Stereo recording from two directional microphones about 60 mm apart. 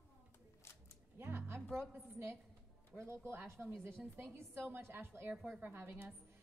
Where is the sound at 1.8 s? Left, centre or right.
Right.